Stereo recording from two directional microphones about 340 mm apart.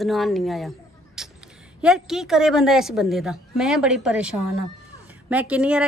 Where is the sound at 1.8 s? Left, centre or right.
Centre.